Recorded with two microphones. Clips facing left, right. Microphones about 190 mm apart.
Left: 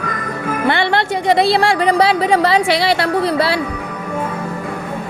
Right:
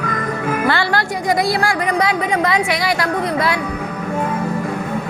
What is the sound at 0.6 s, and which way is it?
Music, 25° left (ahead or behind).